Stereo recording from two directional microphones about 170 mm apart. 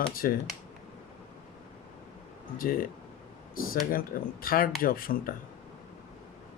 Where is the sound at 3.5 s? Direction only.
60° left (ahead or behind).